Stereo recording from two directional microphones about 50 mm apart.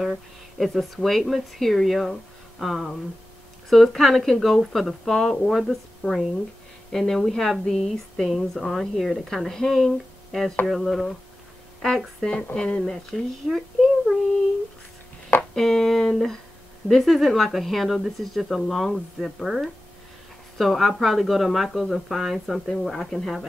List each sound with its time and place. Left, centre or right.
0.0 s speech: centre
12.5 s speech: left
12.8 s speech: centre
15.5 s speech: centre